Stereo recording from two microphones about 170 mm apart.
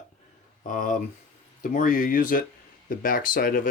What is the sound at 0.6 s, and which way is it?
Speech, 50° left (ahead or behind).